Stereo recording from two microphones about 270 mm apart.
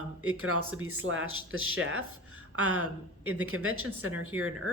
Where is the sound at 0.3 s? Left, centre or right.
Right.